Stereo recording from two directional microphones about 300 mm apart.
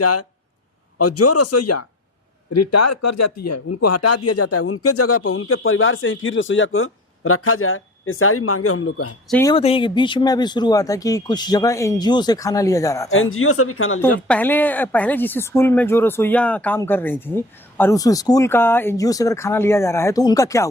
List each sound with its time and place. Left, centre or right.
0.0 s speech: left
9.3 s speech: centre
13.1 s speech: left
14.0 s speech: centre